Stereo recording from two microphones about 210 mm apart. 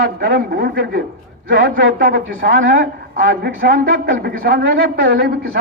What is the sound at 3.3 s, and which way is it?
Speech, 50° right (ahead or behind).